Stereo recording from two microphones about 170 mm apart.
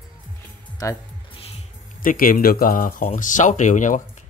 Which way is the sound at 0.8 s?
20° left (ahead or behind).